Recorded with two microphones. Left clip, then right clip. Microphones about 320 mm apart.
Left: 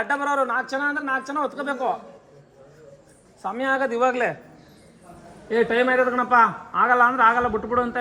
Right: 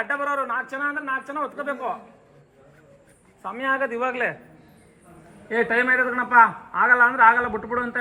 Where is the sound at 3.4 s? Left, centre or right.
Left.